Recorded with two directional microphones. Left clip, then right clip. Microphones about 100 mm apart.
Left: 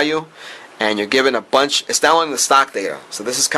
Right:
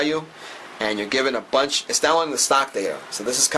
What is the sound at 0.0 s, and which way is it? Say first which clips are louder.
Speech: left 5 dB; 20° left (ahead or behind).